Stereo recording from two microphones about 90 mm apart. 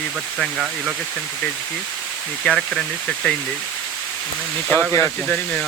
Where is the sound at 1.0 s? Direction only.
Centre (ahead or behind).